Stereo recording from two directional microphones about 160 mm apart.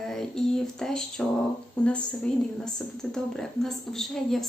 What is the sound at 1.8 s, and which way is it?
A woman's voice, 5° left (ahead or behind).